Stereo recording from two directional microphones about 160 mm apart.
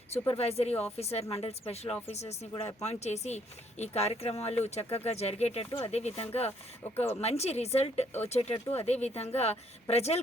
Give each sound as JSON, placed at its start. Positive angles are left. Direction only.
{"t": 0.1, "sound": "speech", "side_deg": 40}
{"t": 6.9, "sound": "speech", "side_deg": 15}
{"t": 7.2, "sound": "speech", "side_deg": 40}